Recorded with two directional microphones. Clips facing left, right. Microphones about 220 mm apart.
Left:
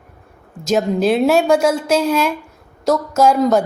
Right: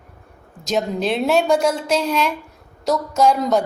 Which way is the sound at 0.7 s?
5° left (ahead or behind).